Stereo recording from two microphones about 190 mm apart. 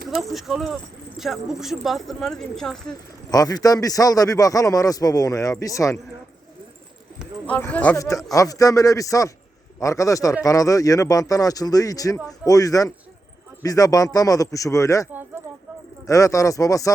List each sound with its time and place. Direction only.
0.1 s speech: centre (ahead or behind)
2.9 s a man's voice: 20° left (ahead or behind)
7.4 s a man's voice: 5° left (ahead or behind)
16.0 s a man's voice: 15° left (ahead or behind)